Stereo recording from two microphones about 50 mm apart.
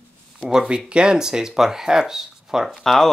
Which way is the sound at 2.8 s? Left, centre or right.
Centre.